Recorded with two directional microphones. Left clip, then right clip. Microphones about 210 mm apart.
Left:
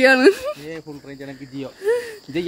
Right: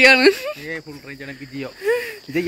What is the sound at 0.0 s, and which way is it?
Speech, 30° left (ahead or behind).